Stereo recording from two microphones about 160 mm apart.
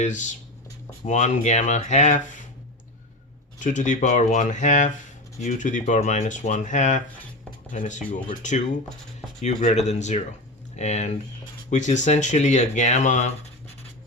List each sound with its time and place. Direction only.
0.0 s speech: 50° left (ahead or behind)
3.6 s speech: 50° left (ahead or behind)